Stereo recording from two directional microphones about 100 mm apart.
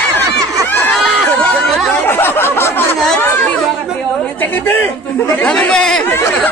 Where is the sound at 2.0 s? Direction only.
20° left (ahead or behind).